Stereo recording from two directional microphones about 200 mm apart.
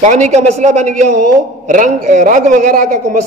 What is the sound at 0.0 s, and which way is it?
A man's voice, 35° right (ahead or behind).